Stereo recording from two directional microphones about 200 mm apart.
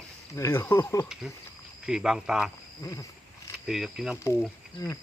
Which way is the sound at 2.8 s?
15° left (ahead or behind).